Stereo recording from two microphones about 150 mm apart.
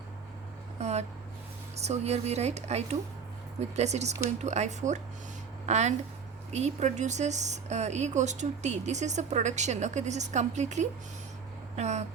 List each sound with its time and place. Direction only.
0.8 s speech: 45° right (ahead or behind)